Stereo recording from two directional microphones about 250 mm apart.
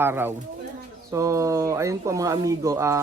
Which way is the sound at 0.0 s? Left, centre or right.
Centre.